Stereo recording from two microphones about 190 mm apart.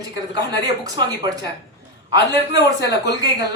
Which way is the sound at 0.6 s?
20° right (ahead or behind).